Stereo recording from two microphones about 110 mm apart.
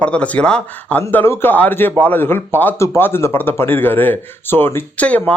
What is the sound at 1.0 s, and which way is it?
A man's voice, 20° left (ahead or behind).